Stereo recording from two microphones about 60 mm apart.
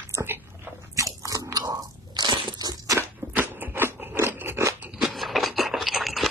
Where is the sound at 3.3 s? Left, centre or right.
Right.